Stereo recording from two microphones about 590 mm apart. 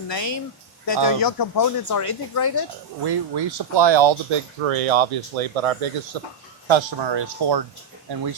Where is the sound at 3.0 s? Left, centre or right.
Right.